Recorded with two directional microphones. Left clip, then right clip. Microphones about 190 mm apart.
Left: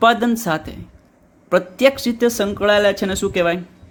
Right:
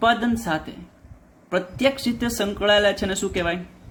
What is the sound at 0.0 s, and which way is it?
Speech, 40° left (ahead or behind).